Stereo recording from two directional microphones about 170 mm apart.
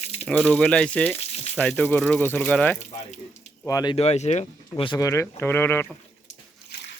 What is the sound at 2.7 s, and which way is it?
Speech, 45° left (ahead or behind).